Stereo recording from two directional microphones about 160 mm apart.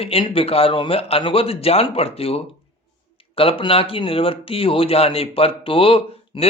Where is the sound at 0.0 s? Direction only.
35° left (ahead or behind).